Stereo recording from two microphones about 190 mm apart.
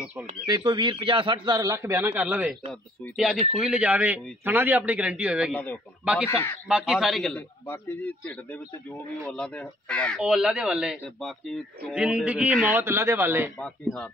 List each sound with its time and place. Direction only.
0.0 s speech: 10° right (ahead or behind)
0.5 s a man's voice: 25° right (ahead or behind); by 5.6 s 5° right (ahead or behind)
6.2 s a man's voice: 15° left (ahead or behind)
6.7 s a man's voice: centre (ahead or behind)
10.2 s a man's voice: 5° right (ahead or behind)